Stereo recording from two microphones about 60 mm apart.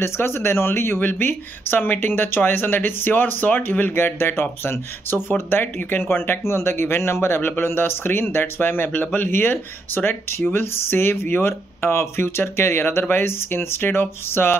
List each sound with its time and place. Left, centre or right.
0.0 s speech: left